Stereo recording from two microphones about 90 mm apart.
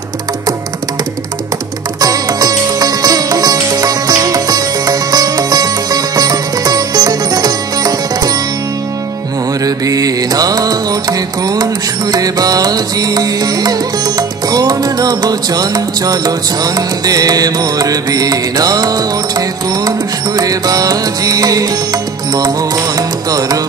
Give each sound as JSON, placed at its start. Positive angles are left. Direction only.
{"t": 2.0, "sound": "music", "side_deg": -45}
{"t": 9.7, "sound": "music", "side_deg": -45}